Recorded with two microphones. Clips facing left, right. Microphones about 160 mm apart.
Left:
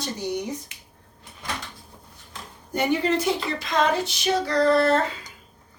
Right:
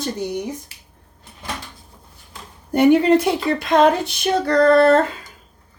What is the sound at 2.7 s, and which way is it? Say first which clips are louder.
Speech: right 10 dB; 60° right (ahead or behind).